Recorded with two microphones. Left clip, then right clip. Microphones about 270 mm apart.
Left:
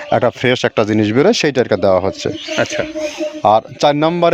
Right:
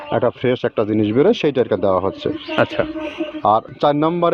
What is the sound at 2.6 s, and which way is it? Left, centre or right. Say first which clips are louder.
Music: even; centre.